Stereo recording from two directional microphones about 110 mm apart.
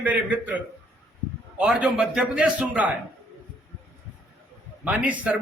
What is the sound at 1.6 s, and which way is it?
A man's voice, 10° right (ahead or behind).